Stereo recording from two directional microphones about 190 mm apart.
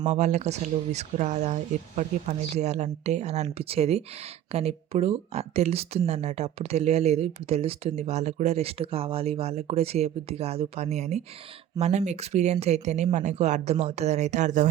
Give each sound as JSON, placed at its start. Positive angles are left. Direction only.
{"t": 0.0, "sound": "speech", "side_deg": -35}